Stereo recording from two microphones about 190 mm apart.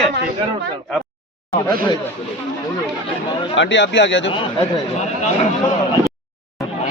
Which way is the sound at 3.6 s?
70° left (ahead or behind).